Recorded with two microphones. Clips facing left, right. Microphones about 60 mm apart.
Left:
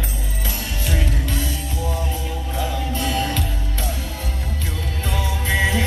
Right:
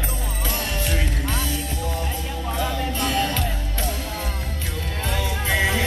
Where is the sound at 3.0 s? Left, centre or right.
Right.